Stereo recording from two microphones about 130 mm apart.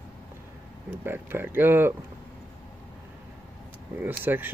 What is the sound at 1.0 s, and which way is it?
Speech, 15° right (ahead or behind).